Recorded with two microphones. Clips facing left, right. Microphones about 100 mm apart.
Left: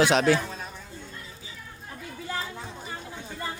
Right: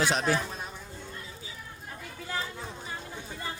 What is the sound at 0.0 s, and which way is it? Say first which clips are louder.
Speech: left 6 dB; 80° left.